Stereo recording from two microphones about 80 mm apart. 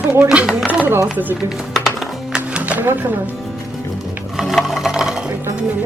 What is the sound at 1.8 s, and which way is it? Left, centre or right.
Music, centre.